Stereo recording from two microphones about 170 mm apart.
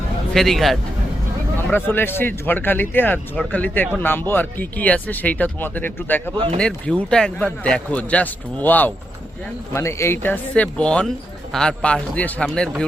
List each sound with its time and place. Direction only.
0.3 s a man's voice: centre (ahead or behind)
1.7 s a man's voice: 10° left (ahead or behind)